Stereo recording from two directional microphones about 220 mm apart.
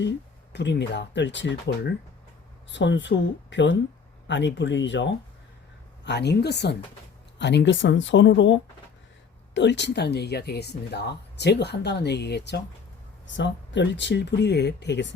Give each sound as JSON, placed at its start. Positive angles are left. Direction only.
{"t": 0.5, "sound": "speech", "side_deg": 50}
{"t": 9.6, "sound": "speech", "side_deg": 50}